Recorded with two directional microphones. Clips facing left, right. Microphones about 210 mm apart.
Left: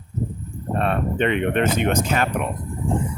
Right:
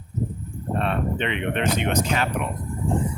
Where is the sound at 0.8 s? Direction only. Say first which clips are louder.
Left 4 dB; 45° left (ahead or behind).